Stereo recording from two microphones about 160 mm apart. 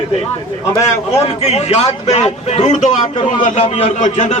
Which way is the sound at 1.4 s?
40° left (ahead or behind).